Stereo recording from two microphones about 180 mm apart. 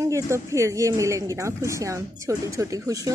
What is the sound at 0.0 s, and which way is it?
A woman's voice, 15° right (ahead or behind).